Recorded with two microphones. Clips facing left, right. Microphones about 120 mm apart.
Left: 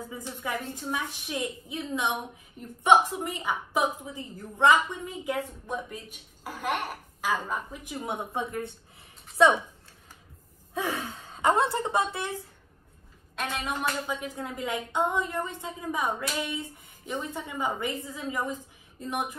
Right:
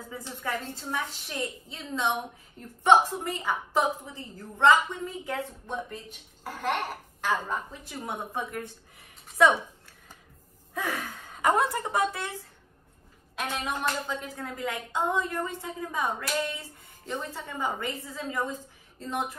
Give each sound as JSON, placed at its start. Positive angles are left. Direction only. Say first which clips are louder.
{"t": 0.1, "sound": "a woman's voice", "louder": "right 2 dB", "side_deg": 15}
{"t": 10.7, "sound": "speech", "louder": "left 2 dB", "side_deg": 20}
{"t": 13.4, "sound": "a woman's voice", "louder": "even", "side_deg": 0}
{"t": 14.2, "sound": "a woman's voice", "louder": "left 1 dB", "side_deg": 20}